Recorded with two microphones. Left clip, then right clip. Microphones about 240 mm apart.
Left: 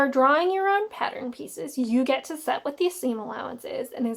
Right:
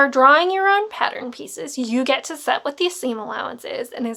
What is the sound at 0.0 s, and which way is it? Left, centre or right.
Speech, right.